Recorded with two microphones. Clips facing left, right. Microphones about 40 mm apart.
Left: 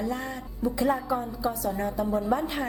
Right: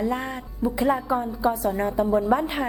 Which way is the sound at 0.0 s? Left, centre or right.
Right.